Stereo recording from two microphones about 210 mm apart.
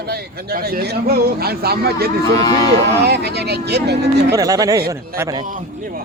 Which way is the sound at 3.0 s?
50° right (ahead or behind).